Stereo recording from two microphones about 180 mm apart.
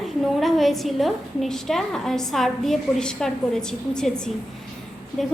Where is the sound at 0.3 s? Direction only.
Centre (ahead or behind).